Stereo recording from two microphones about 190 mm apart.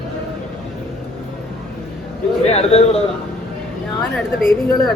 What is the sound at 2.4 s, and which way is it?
Speech, 35° left (ahead or behind).